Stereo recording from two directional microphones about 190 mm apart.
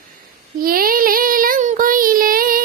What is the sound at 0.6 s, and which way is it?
Child singing, 50° right (ahead or behind).